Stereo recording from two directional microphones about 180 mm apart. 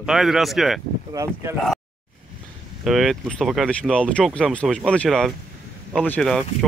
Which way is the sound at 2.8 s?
Centre (ahead or behind).